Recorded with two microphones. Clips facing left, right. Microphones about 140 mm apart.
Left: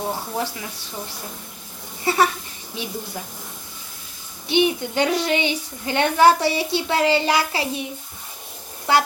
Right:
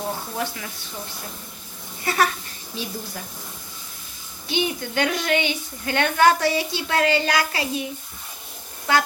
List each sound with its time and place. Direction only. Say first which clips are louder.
0.3 s speech: left 2 dB; 25° left (ahead or behind)
2.0 s speech: left 3 dB; 25° left (ahead or behind)
4.4 s speech: left 6 dB; 25° left (ahead or behind)